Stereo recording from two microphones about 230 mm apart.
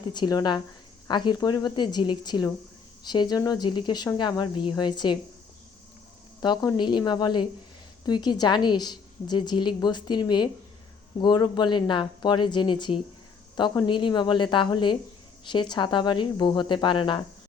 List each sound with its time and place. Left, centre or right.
0.1 s a woman's voice: centre
6.4 s a woman's voice: centre